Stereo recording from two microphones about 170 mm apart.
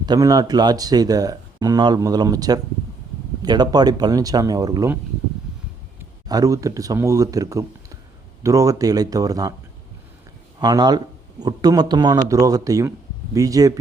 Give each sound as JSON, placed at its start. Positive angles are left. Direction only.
{"t": 0.0, "sound": "speech", "side_deg": -25}
{"t": 6.2, "sound": "speech", "side_deg": -20}
{"t": 10.6, "sound": "speech", "side_deg": -25}